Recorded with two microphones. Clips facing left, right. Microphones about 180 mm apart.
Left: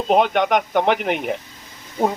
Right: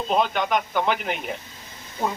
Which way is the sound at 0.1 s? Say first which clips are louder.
Left 6 dB; 65° left (ahead or behind).